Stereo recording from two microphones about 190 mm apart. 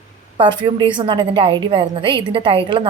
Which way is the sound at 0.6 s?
25° right (ahead or behind).